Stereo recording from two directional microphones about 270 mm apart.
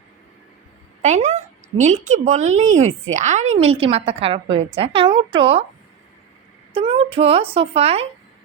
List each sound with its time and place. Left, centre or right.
1.0 s a woman's voice: right
6.7 s speech: centre